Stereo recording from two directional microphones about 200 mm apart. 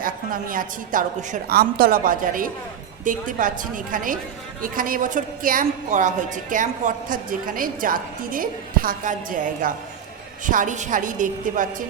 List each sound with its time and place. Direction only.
0.0 s a woman's voice: 45° right (ahead or behind)